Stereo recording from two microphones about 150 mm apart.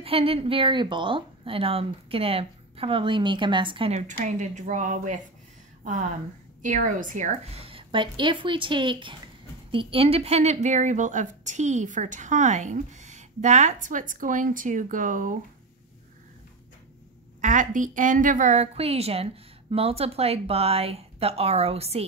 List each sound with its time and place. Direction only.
0.0 s a woman's voice: 40° right (ahead or behind)
4.2 s a woman's voice: 55° right (ahead or behind)
6.6 s a woman's voice: 60° right (ahead or behind)
17.4 s a woman's voice: 60° right (ahead or behind); by 22.0 s 45° right (ahead or behind)